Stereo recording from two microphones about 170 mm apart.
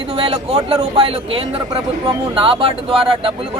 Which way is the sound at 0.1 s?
35° right (ahead or behind).